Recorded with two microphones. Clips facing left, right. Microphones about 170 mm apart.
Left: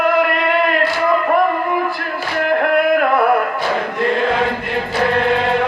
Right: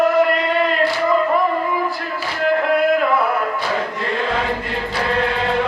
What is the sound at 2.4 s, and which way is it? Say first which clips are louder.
Music: left 1 dB; 60° left (ahead or behind).